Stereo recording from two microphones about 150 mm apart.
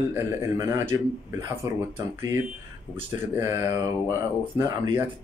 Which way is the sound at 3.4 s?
15° right (ahead or behind).